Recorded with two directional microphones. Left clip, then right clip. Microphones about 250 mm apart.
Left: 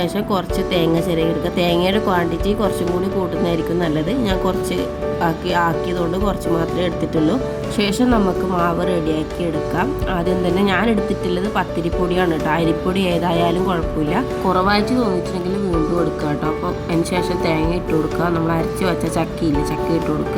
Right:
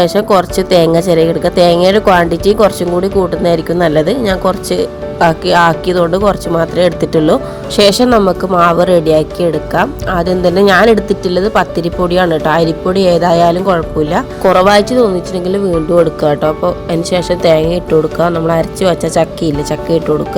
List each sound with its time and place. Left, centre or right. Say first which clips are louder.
0.0 s a woman's voice: right 11 dB; right
17.0 s a woman's voice: right 8 dB; centre